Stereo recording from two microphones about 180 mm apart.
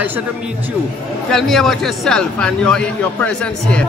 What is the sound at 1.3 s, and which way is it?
A man's voice, centre (ahead or behind).